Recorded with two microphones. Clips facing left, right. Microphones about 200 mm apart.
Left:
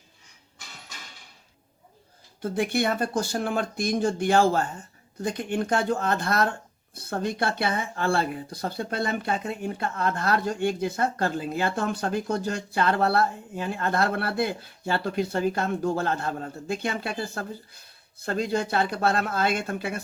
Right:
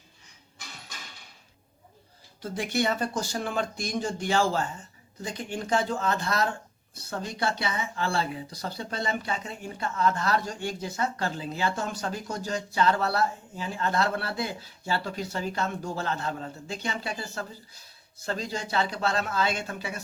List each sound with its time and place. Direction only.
2.4 s speech: 55° left (ahead or behind)